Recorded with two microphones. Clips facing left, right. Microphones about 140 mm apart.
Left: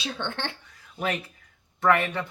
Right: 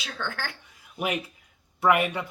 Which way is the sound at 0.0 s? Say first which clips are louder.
Left 2 dB; 25° left (ahead or behind).